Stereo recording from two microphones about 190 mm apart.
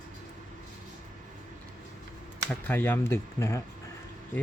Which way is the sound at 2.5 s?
10° left (ahead or behind).